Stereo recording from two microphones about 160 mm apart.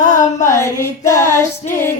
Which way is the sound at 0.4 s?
15° left (ahead or behind).